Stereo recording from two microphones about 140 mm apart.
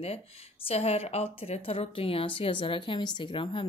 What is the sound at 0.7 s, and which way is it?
Speech, 45° left (ahead or behind).